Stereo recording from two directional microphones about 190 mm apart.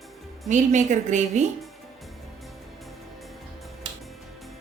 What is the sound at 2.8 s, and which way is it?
Music, centre (ahead or behind).